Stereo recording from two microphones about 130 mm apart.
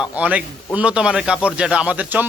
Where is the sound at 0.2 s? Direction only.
10° right (ahead or behind).